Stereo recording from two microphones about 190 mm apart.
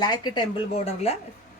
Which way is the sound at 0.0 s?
20° left (ahead or behind).